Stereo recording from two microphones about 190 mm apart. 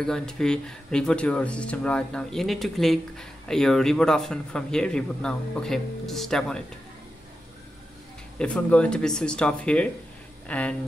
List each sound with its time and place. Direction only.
0.0 s speech: 5° left (ahead or behind)
8.4 s speech: 5° left (ahead or behind)